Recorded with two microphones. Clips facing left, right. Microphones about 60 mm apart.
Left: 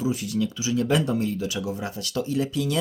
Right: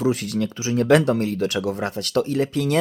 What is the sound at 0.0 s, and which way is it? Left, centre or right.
Speech, right.